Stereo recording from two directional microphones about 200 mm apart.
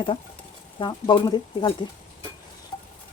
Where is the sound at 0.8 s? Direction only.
25° left (ahead or behind).